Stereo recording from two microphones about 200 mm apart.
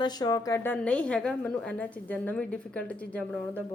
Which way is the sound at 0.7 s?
5° left (ahead or behind).